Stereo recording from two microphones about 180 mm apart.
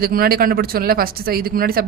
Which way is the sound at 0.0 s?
55° right (ahead or behind).